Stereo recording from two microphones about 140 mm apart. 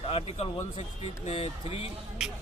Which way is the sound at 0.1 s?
45° left (ahead or behind).